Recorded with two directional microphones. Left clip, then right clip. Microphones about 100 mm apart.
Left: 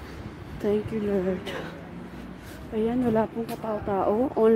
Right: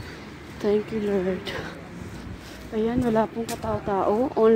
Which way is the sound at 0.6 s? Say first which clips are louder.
Right 3 dB; centre (ahead or behind).